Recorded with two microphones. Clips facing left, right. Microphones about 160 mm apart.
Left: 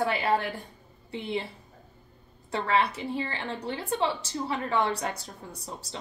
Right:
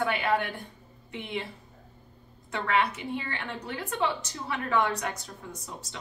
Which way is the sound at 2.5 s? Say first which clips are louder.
Left 1 dB; 30° left (ahead or behind).